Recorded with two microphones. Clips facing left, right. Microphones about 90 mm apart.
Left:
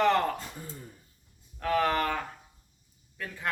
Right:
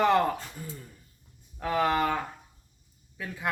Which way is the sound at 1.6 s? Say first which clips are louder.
Right 1 dB; 15° right (ahead or behind).